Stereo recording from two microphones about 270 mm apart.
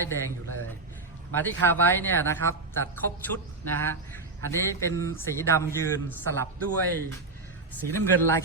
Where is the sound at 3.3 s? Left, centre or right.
Right.